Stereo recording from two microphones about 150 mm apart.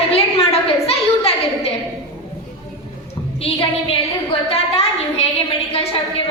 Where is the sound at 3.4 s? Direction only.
40° left (ahead or behind).